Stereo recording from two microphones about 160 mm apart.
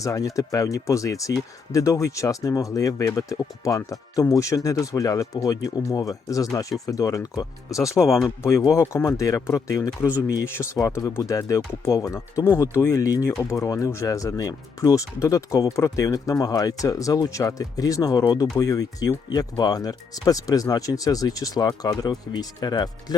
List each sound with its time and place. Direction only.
0.0 s speech: 20° left (ahead or behind)
8.0 s speech: centre (ahead or behind)
8.4 s speech: 15° left (ahead or behind)